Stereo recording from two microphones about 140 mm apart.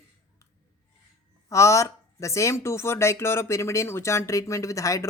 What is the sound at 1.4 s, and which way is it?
Speech, 20° left (ahead or behind).